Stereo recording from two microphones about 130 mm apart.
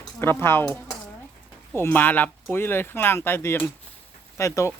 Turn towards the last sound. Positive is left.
turn(degrees=25)  # may be behind; listen again after turning